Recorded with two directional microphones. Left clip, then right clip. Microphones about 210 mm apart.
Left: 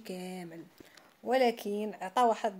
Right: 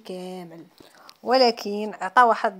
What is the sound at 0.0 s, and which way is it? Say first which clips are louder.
A woman's voice: right 7 dB; 20° right (ahead or behind).